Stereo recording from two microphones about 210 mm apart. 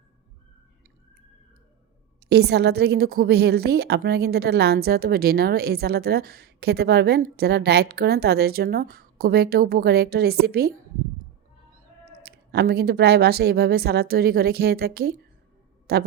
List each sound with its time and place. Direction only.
2.3 s a woman's voice: 50° right (ahead or behind)
12.2 s a woman's voice: 50° right (ahead or behind)